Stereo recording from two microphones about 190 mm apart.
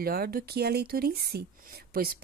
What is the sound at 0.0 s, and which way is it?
Speech, 55° right (ahead or behind).